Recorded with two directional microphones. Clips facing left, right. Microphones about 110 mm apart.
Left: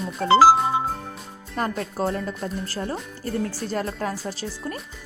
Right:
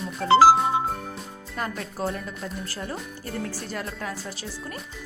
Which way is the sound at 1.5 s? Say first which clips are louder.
Left 5 dB; 40° left (ahead or behind).